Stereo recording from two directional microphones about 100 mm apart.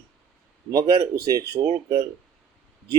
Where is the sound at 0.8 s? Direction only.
50° right (ahead or behind).